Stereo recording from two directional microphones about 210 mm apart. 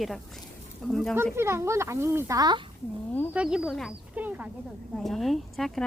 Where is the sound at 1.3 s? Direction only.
10° right (ahead or behind).